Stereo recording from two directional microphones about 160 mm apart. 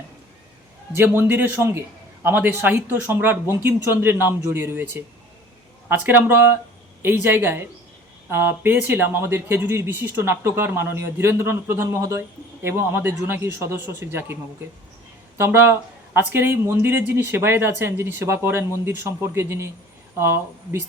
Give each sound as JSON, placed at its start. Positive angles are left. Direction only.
{"t": 0.9, "sound": "speech", "side_deg": -10}
{"t": 15.4, "sound": "speech", "side_deg": -15}